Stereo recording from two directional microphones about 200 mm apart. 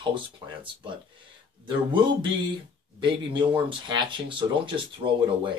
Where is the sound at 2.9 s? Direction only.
25° right (ahead or behind).